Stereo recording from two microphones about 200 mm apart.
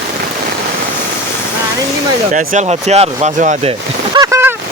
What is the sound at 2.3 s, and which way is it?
Speech, 35° right (ahead or behind).